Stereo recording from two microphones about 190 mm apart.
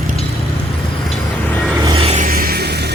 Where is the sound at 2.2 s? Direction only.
50° right (ahead or behind).